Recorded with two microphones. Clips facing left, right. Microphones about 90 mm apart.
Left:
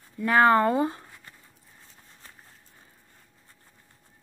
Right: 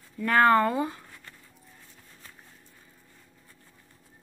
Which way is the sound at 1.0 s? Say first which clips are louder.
Even; 15° left (ahead or behind).